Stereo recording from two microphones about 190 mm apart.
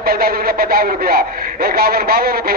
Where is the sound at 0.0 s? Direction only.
50° right (ahead or behind).